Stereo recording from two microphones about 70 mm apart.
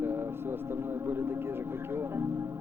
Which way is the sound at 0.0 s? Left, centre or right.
Right.